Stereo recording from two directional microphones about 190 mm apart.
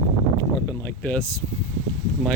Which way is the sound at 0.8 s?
10° left (ahead or behind).